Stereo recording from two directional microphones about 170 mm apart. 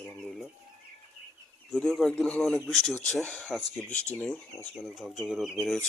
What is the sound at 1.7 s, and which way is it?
Speech, centre (ahead or behind).